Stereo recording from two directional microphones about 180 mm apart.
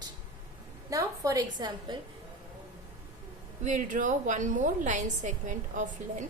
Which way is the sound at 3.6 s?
45° right (ahead or behind).